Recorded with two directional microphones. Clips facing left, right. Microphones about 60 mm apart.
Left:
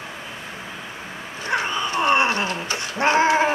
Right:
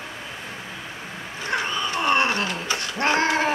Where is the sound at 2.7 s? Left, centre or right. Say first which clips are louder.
Left 3 dB; left.